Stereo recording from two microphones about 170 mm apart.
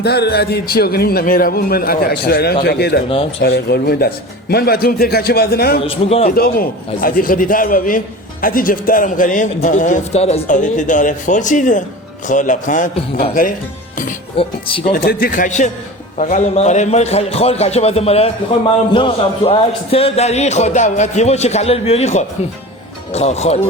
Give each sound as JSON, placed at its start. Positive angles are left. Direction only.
{"t": 0.0, "sound": "a man's voice", "side_deg": 70}
{"t": 5.8, "sound": "a man's voice", "side_deg": 35}
{"t": 6.3, "sound": "a man's voice", "side_deg": 60}
{"t": 14.3, "sound": "a man's voice", "side_deg": 30}
{"t": 14.9, "sound": "a man's voice", "side_deg": 60}